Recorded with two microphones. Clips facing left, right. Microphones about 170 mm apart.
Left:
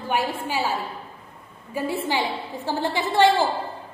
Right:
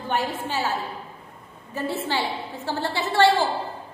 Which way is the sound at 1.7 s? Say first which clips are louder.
Left 2 dB; 10° left (ahead or behind).